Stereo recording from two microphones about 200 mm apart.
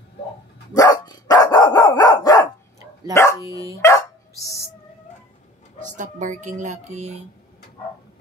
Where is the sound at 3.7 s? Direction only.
15° left (ahead or behind).